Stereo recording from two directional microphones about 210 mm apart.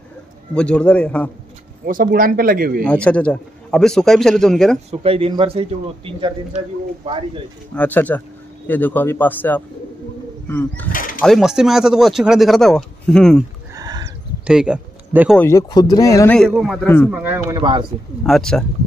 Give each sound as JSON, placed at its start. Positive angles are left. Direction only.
{"t": 0.6, "sound": "speech", "side_deg": 5}
{"t": 1.9, "sound": "speech", "side_deg": -40}
{"t": 2.8, "sound": "speech", "side_deg": 5}
{"t": 4.9, "sound": "speech", "side_deg": -25}
{"t": 7.7, "sound": "speech", "side_deg": 5}
{"t": 10.9, "sound": "speech", "side_deg": 40}
{"t": 11.1, "sound": "speech", "side_deg": 0}
{"t": 13.7, "sound": "a sound", "side_deg": -20}
{"t": 14.4, "sound": "speech", "side_deg": -5}
{"t": 15.3, "sound": "speech", "side_deg": 10}
{"t": 16.3, "sound": "speech", "side_deg": 0}
{"t": 17.1, "sound": "speech", "side_deg": -10}
{"t": 17.6, "sound": "speech", "side_deg": -20}
{"t": 18.2, "sound": "speech", "side_deg": 5}